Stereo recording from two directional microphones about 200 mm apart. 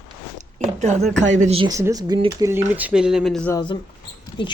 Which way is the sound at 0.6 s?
35° right (ahead or behind).